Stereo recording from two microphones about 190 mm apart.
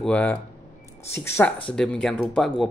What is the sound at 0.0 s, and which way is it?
Speech, 5° left (ahead or behind).